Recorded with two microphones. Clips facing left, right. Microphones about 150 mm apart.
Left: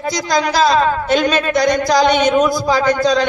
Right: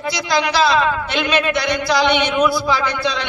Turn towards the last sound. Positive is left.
turn(degrees=40)  # may be behind; listen again after turning